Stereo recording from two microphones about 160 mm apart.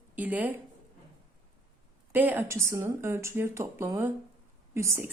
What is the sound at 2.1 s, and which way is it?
A woman's voice, 10° right (ahead or behind).